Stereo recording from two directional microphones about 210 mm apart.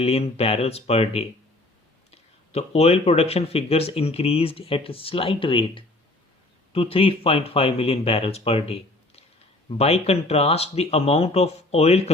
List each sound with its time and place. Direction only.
0.0 s speech: 30° left (ahead or behind)